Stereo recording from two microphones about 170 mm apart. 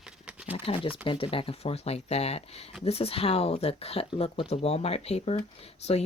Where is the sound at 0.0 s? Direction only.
5° right (ahead or behind).